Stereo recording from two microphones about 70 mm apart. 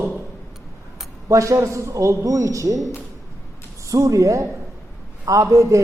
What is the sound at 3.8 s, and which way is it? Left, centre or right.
A man's voice, right.